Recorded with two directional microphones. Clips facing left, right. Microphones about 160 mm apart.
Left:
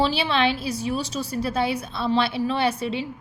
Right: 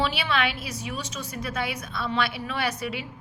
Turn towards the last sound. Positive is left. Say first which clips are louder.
# left 5 dB
turn(degrees=30)  # may be behind; listen again after turning